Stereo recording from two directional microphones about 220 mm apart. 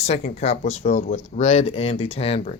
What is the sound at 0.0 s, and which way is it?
Speech, 30° left (ahead or behind).